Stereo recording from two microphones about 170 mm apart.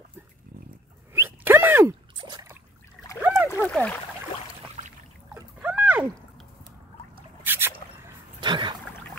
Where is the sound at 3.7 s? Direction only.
5° left (ahead or behind).